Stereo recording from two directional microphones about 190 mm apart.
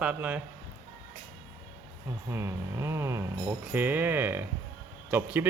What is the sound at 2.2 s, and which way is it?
Speech, 15° right (ahead or behind).